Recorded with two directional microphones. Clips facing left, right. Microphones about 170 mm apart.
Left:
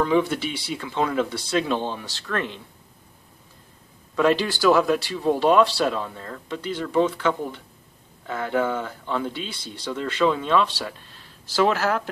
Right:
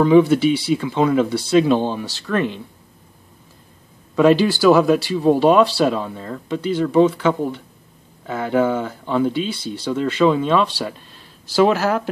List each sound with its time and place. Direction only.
0.0 s speech: 10° right (ahead or behind)
4.1 s speech: 10° right (ahead or behind)